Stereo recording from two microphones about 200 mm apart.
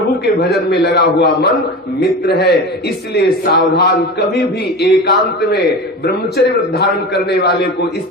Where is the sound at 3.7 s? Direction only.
55° left (ahead or behind).